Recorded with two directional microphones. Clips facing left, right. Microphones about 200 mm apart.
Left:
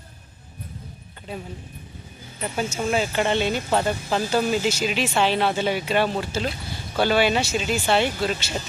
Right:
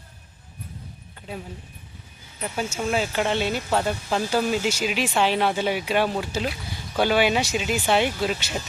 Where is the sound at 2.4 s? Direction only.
5° right (ahead or behind).